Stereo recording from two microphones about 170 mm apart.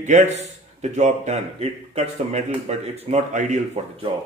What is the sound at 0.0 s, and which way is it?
A man's voice, 45° right (ahead or behind).